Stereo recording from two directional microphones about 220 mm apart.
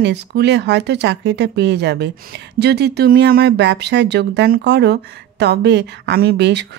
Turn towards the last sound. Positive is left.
turn(degrees=-50)  # may be behind; listen again after turning